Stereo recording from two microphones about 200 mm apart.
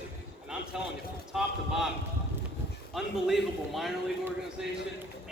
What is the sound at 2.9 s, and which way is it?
A man's voice, centre (ahead or behind).